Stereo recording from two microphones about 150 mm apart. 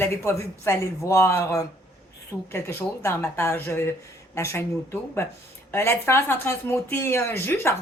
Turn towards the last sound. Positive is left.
turn(degrees=15)  # may be behind; listen again after turning